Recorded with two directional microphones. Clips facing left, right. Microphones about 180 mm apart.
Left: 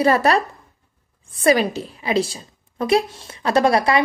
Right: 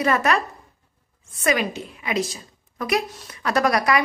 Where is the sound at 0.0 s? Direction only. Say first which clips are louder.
Left 4 dB; 35° left (ahead or behind).